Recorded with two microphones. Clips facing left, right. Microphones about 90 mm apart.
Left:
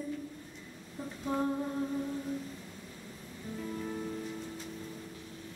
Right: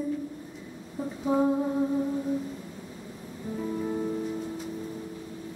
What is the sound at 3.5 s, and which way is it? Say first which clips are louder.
Music: right 8 dB; 20° right (ahead or behind).